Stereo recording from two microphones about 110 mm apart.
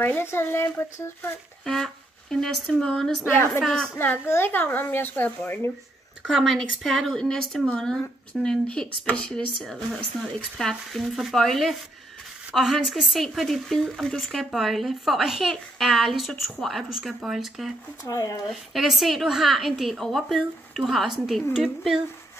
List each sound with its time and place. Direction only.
0.0 s speech: 20° left (ahead or behind)
1.6 s speech: 5° left (ahead or behind)
3.3 s speech: 20° left (ahead or behind)
3.6 s a woman's voice: 5° left (ahead or behind)
3.9 s speech: 20° left (ahead or behind)
6.2 s a woman's voice: centre (ahead or behind)
18.0 s speech: 30° left (ahead or behind)
18.5 s a woman's voice: centre (ahead or behind)